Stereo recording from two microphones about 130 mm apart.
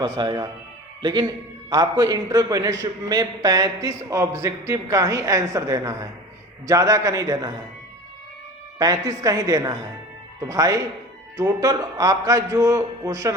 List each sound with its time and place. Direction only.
0.0 s speech: 35° right (ahead or behind)
1.7 s a man's voice: 30° right (ahead or behind)
8.8 s a man's voice: 25° right (ahead or behind)